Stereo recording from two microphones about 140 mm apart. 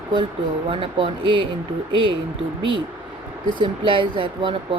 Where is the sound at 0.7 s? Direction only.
40° right (ahead or behind).